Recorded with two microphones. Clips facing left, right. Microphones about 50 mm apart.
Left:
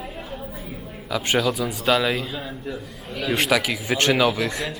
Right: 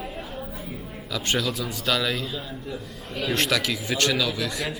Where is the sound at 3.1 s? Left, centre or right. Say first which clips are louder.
Left 3 dB; centre; by 4.6 s left.